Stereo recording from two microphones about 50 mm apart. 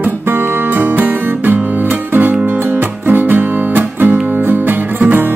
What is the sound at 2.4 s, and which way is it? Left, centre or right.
Music, right.